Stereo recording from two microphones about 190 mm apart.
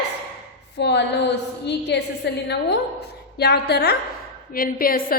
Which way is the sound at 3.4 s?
60° left (ahead or behind).